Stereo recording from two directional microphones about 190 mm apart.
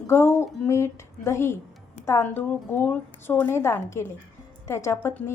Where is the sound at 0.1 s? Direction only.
15° left (ahead or behind).